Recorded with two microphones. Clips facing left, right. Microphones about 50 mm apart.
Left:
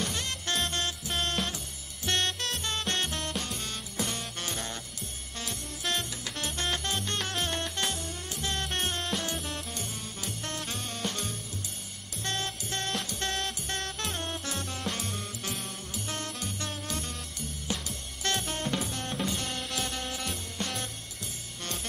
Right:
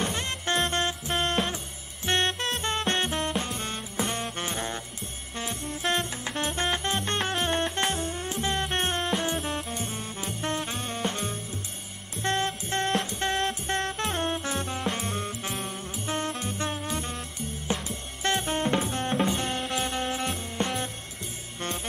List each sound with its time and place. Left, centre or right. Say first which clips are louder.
0.0 s music: right 4 dB; right
9.4 s music: right 6 dB; centre
9.7 s music: right 5 dB; right